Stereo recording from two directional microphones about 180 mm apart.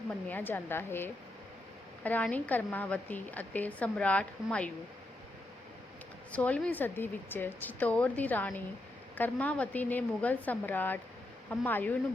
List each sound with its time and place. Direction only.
0.3 s a woman's voice: 10° left (ahead or behind)
6.3 s a woman's voice: 5° left (ahead or behind)